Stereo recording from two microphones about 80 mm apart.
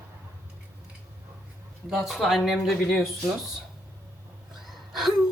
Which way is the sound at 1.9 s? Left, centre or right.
Centre.